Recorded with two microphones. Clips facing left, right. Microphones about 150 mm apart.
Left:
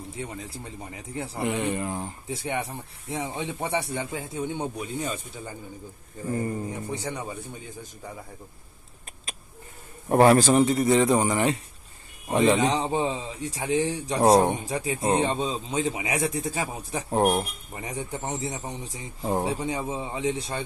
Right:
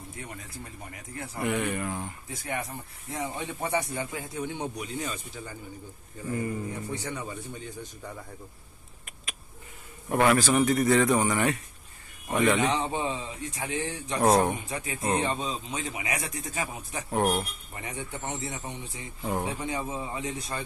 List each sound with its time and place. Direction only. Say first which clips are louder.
0.2 s speech: left 6 dB; 30° left (ahead or behind)
6.3 s speech: left 2 dB; 35° left (ahead or behind)
6.9 s speech: left 2 dB; 20° left (ahead or behind)
10.0 s speech: left 5 dB; 35° left (ahead or behind)
10.7 s speech: left 2 dB; 20° left (ahead or behind)